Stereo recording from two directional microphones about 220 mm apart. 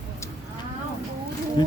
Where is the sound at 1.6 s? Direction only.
20° left (ahead or behind).